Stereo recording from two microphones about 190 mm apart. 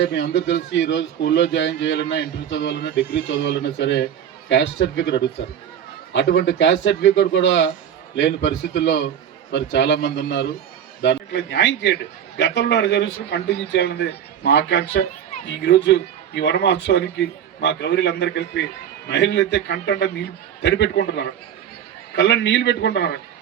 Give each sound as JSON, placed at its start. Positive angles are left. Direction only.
{"t": 0.0, "sound": "a man's voice", "side_deg": 70}
{"t": 22.1, "sound": "a man's voice", "side_deg": 70}